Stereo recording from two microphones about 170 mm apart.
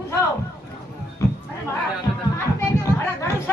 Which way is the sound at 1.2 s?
15° left (ahead or behind).